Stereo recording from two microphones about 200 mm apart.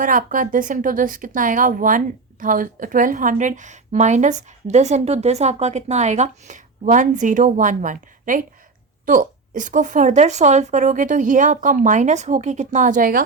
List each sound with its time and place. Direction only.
0.0 s speech: 45° right (ahead or behind)